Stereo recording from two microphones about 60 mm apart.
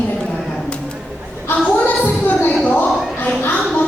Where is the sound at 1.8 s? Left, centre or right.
Left.